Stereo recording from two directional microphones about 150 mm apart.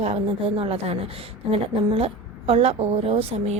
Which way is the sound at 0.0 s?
45° right (ahead or behind).